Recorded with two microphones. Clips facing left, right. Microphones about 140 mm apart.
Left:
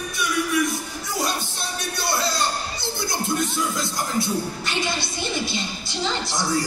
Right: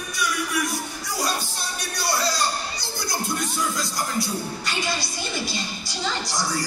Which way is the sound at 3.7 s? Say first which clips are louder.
Left 2 dB; 25° left (ahead or behind).